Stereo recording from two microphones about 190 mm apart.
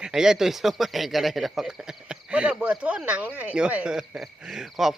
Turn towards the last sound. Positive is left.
turn(degrees=0)  # may be behind; listen again after turning